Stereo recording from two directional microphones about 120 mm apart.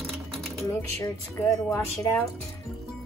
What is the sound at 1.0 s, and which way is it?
Speech, 20° left (ahead or behind).